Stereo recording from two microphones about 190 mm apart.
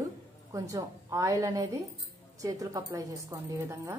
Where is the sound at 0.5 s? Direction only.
15° right (ahead or behind).